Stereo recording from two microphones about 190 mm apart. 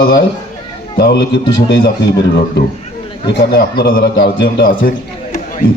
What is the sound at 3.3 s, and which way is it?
A man's voice, 55° left (ahead or behind).